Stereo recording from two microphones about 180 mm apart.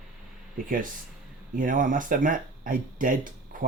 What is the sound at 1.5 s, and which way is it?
Speech, 50° right (ahead or behind).